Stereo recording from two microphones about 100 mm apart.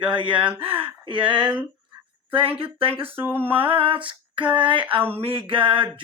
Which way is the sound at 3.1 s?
20° right (ahead or behind).